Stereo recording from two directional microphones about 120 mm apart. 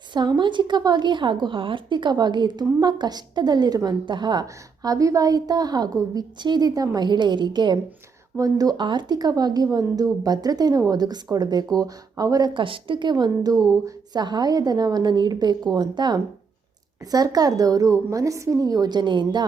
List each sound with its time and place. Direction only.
0.1 s a woman's voice: 40° right (ahead or behind)
12.5 s a woman's voice: 45° right (ahead or behind)